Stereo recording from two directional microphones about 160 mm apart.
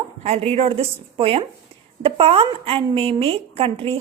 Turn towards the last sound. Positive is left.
turn(degrees=-35)  # may be behind; listen again after turning